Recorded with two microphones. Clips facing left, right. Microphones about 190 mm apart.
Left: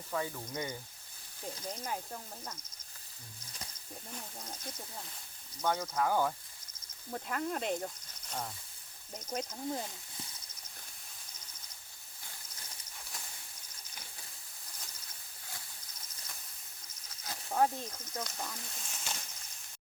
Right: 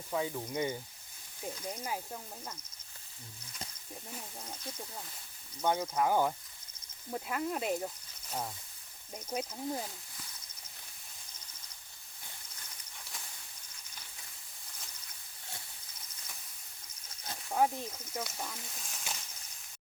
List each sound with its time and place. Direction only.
0.1 s speech: 15° right (ahead or behind)
4.1 s speech: 5° right (ahead or behind)
5.6 s speech: 10° right (ahead or behind)
7.1 s speech: 5° right (ahead or behind)
9.1 s speech: 10° right (ahead or behind)
17.5 s speech: 10° right (ahead or behind)